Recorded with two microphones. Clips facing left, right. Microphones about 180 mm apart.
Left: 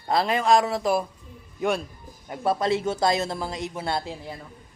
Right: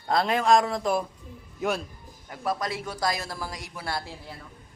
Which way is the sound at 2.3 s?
25° left (ahead or behind).